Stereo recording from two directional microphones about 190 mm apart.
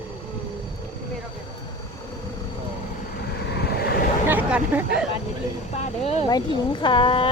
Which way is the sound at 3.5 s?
55° left (ahead or behind).